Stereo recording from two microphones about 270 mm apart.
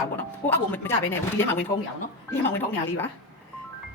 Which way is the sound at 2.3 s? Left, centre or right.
Centre.